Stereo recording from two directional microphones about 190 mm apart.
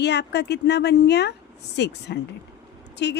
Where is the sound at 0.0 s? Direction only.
65° left (ahead or behind).